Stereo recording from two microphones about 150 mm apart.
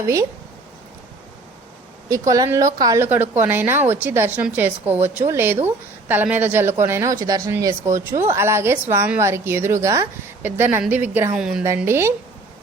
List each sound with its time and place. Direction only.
2.0 s speech: 20° right (ahead or behind); by 11.6 s 5° right (ahead or behind)
11.8 s speech: 15° right (ahead or behind)